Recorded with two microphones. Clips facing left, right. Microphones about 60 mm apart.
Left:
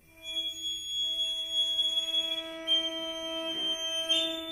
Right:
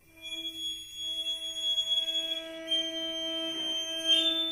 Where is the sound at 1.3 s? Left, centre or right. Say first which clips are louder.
Left 3 dB; right.